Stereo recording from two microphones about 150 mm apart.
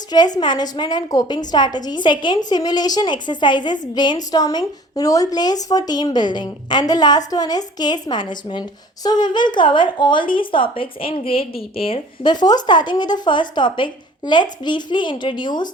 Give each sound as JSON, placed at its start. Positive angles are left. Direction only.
{"t": 0.1, "sound": "a woman's voice", "side_deg": 30}